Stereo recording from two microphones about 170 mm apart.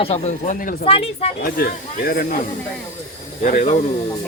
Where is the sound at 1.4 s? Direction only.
65° left (ahead or behind).